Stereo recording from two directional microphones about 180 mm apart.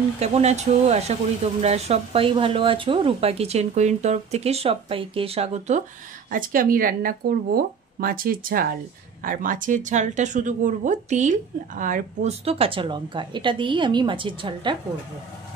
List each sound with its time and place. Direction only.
0.2 s speech: 35° right (ahead or behind)
6.3 s speech: 50° right (ahead or behind); by 14.8 s 25° right (ahead or behind)